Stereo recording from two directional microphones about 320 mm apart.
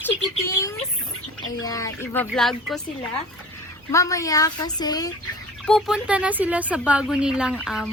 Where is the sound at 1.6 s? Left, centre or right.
Centre.